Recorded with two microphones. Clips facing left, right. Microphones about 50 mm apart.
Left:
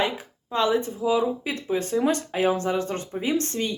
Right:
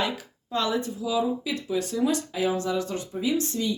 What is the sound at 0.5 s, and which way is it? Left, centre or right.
Speech, left.